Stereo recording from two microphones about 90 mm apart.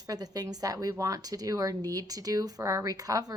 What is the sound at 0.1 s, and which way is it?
A woman's voice, 45° right (ahead or behind).